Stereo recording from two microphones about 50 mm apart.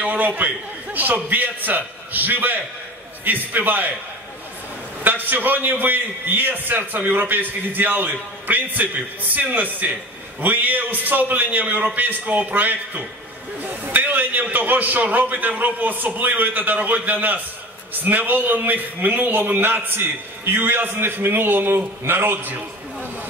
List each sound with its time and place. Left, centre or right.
0.0 s a man's voice: right
5.0 s a man's voice: right